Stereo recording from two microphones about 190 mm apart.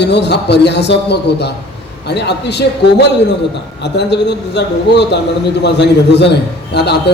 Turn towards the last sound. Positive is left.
turn(degrees=65)  # may be behind; listen again after turning